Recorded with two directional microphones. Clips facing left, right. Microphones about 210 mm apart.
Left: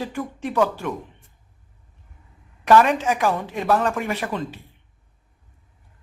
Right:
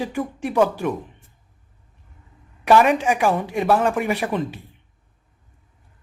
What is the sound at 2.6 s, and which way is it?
Speech, 10° right (ahead or behind).